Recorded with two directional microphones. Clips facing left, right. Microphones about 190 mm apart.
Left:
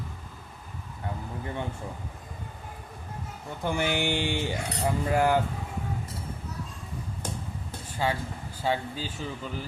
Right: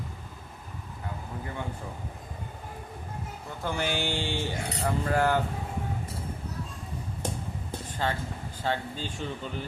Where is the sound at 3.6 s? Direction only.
15° left (ahead or behind).